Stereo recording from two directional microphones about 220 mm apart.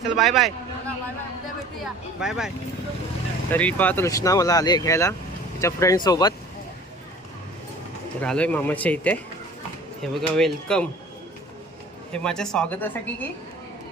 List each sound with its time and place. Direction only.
0.2 s a sound: centre (ahead or behind)
1.8 s speech: centre (ahead or behind)
3.5 s speech: 5° left (ahead or behind)
8.2 s speech: 5° left (ahead or behind)
12.1 s speech: 5° left (ahead or behind)